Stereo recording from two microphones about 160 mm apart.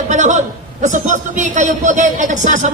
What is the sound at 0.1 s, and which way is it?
A man's voice, 50° right (ahead or behind).